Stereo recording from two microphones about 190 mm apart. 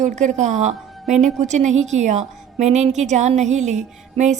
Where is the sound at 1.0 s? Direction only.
Centre (ahead or behind).